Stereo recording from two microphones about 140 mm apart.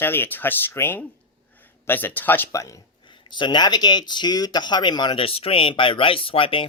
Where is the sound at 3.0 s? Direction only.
35° left (ahead or behind).